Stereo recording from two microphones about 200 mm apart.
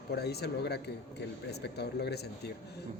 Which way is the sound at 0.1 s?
55° left (ahead or behind).